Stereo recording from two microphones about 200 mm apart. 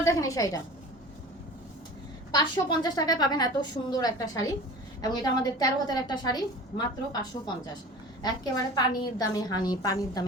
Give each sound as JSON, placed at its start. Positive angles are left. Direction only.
{"t": 0.0, "sound": "a woman's voice", "side_deg": 15}
{"t": 2.3, "sound": "a woman's voice", "side_deg": 20}